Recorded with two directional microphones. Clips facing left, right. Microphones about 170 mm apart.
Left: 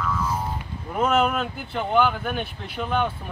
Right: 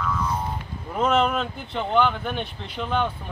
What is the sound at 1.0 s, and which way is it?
Speech, 5° left (ahead or behind).